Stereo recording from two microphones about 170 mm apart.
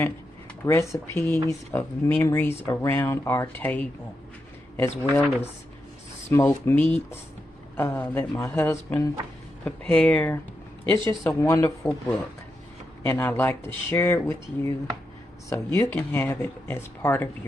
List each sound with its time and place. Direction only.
0.6 s speech: 15° left (ahead or behind)
10.9 s speech: 30° right (ahead or behind)
11.2 s speech: 15° left (ahead or behind)
13.0 s speech: 10° left (ahead or behind)